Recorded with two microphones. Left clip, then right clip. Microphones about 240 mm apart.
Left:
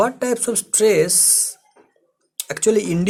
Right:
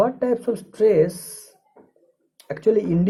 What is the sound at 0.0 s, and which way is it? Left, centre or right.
Speech, left.